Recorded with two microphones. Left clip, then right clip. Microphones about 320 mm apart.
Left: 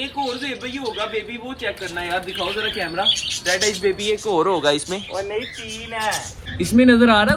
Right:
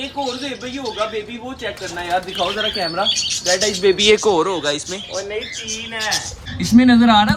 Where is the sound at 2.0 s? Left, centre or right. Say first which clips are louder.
Right 5 dB; centre.